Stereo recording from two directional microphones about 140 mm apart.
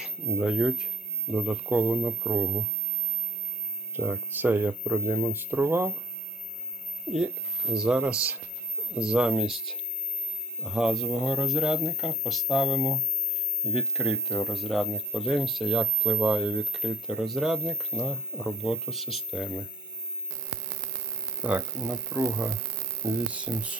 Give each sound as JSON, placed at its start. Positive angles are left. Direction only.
{"t": 0.0, "sound": "speech", "side_deg": -5}
{"t": 3.9, "sound": "speech", "side_deg": -15}
{"t": 7.1, "sound": "speech", "side_deg": -5}
{"t": 21.4, "sound": "speech", "side_deg": -5}